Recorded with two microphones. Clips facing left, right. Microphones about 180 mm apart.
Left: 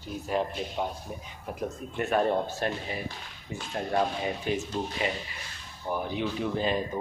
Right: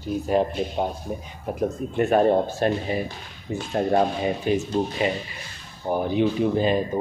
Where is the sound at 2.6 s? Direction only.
25° right (ahead or behind).